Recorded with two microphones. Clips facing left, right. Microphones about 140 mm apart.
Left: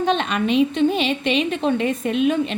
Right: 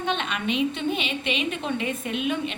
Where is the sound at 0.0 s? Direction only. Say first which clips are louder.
Left 7 dB; 35° left (ahead or behind).